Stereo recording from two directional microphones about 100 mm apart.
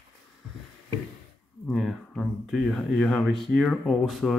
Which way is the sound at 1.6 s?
5° left (ahead or behind).